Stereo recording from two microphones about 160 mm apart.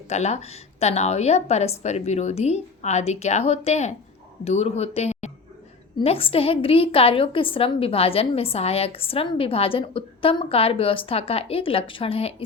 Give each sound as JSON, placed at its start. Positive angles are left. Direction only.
{"t": 0.1, "sound": "a woman's voice", "side_deg": 45}